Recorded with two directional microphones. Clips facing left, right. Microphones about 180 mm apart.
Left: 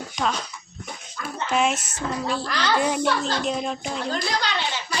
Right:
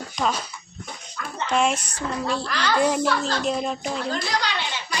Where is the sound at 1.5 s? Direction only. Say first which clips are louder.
Right 1 dB; centre (ahead or behind).